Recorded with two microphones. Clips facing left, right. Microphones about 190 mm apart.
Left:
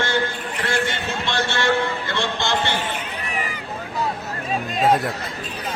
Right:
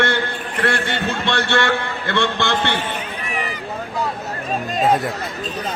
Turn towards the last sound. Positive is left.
turn(degrees=0)  # may be behind; listen again after turning